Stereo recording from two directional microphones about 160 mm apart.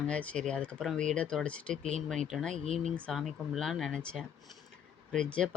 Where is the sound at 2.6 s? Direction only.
50° right (ahead or behind).